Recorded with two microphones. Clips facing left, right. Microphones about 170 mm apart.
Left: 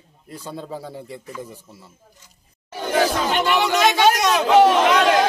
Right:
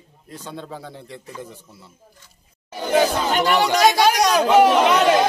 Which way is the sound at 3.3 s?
40° right (ahead or behind).